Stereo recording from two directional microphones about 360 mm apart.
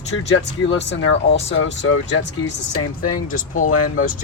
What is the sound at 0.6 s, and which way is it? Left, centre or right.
Speech, left.